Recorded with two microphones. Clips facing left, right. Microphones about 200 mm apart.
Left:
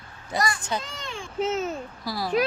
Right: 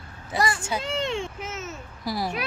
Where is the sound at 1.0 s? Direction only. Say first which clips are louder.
Right 9 dB; 25° right (ahead or behind).